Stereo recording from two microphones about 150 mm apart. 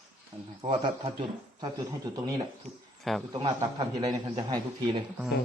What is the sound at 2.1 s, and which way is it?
Speech, 25° right (ahead or behind).